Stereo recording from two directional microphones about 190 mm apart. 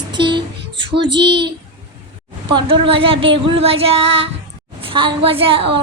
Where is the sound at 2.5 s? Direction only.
25° right (ahead or behind).